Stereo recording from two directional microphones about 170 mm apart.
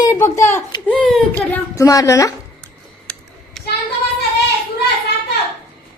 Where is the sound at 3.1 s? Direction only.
5° left (ahead or behind).